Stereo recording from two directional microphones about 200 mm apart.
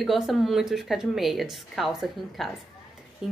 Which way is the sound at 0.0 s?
Centre (ahead or behind).